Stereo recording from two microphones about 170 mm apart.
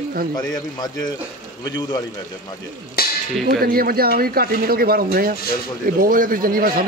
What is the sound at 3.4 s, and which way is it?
Speech, 60° right (ahead or behind).